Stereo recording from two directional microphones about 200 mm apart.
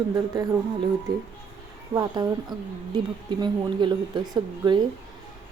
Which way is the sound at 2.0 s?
20° right (ahead or behind).